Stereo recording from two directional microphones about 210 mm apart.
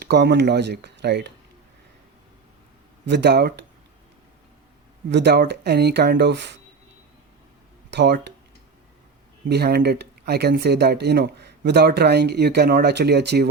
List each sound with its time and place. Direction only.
0.0 s speech: 50° right (ahead or behind)
3.1 s speech: 55° right (ahead or behind)
5.1 s speech: 50° right (ahead or behind)
7.9 s speech: 55° right (ahead or behind)
9.5 s speech: 50° right (ahead or behind)